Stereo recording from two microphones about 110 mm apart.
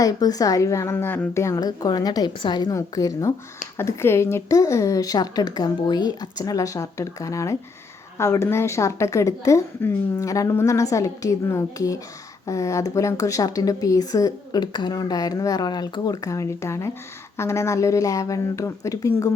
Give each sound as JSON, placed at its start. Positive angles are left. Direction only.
{"t": 0.0, "sound": "a woman's voice", "side_deg": 35}
{"t": 1.5, "sound": "a woman's voice", "side_deg": 35}